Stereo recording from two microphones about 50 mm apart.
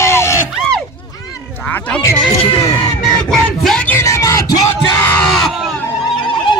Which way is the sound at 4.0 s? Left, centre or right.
Left.